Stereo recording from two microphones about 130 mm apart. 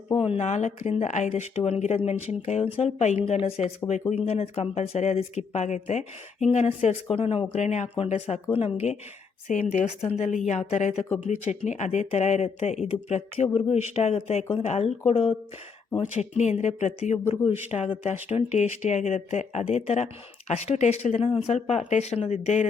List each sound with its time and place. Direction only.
0.2 s speech: 60° left (ahead or behind)
1.3 s speech: 50° left (ahead or behind)
16.3 s speech: 65° left (ahead or behind)
17.4 s speech: 45° left (ahead or behind)